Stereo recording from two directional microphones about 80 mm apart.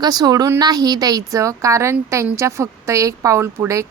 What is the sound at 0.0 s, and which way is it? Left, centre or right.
A woman's voice, right.